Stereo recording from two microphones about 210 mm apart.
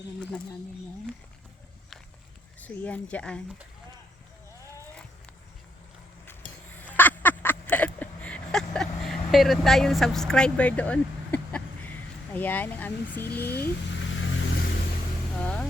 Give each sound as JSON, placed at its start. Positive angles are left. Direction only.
{"t": 2.6, "sound": "speech", "side_deg": 5}
{"t": 6.7, "sound": "a sound", "side_deg": 10}
{"t": 9.3, "sound": "speech", "side_deg": 0}
{"t": 13.5, "sound": "vehicle", "side_deg": 55}
{"t": 15.4, "sound": "speech", "side_deg": 5}